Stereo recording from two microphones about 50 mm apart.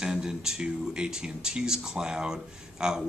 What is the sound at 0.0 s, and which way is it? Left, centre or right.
Speech, centre.